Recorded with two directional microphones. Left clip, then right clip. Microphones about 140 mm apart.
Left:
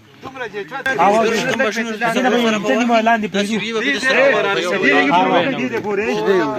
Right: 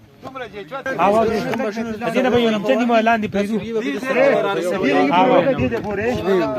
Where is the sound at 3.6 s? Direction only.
85° right.